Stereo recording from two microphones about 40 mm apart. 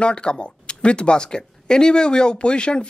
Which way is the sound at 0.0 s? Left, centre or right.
Left.